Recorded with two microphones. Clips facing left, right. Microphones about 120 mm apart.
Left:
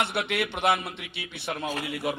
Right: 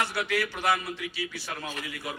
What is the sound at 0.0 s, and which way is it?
A man's voice, 25° left (ahead or behind).